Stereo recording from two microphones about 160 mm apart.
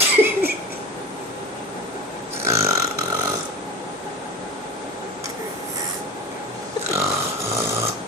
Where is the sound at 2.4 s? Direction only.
20° right (ahead or behind).